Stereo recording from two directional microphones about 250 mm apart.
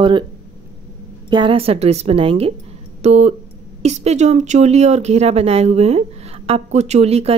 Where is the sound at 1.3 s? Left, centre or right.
Centre.